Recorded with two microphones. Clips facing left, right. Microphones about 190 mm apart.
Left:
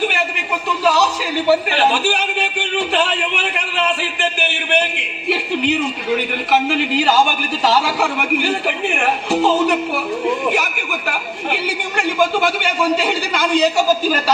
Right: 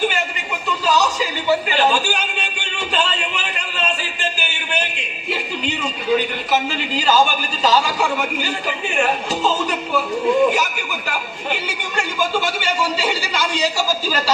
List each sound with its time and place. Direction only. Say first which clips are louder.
0.9 s speech: left 2 dB; 65° left (ahead or behind)
6.5 s a man's voice: left 5 dB; 65° left (ahead or behind)
12.1 s a man's voice: left 5 dB; 60° left (ahead or behind)